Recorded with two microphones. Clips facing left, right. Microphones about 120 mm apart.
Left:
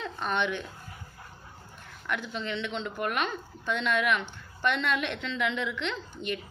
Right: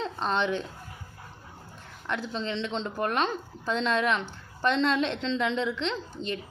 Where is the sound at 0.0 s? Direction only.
30° right (ahead or behind).